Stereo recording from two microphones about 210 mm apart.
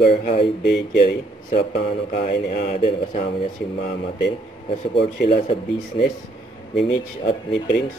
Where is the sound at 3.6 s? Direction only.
50° left (ahead or behind).